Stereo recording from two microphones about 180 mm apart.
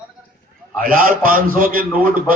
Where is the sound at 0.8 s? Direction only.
50° right (ahead or behind).